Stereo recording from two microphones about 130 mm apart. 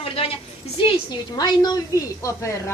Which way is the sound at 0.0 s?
45° left (ahead or behind).